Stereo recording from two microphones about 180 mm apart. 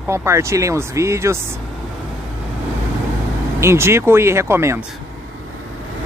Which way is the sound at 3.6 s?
15° right (ahead or behind).